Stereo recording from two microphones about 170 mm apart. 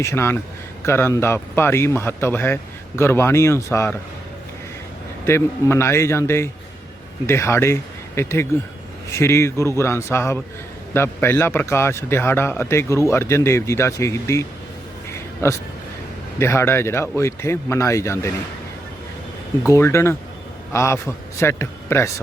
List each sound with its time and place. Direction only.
0.0 s speech: 15° left (ahead or behind)
5.2 s speech: 15° left (ahead or behind)
15.1 s a sound: 15° left (ahead or behind)
16.4 s speech: 15° left (ahead or behind)
19.6 s speech: 15° left (ahead or behind)